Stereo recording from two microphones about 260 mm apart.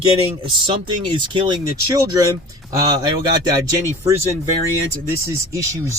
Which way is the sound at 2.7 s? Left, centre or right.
Centre.